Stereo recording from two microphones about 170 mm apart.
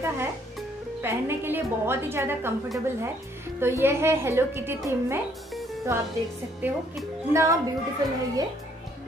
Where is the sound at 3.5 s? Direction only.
15° right (ahead or behind).